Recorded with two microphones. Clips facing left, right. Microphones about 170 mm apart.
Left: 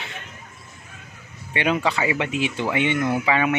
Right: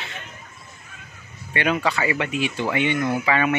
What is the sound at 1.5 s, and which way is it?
Speech, 20° left (ahead or behind).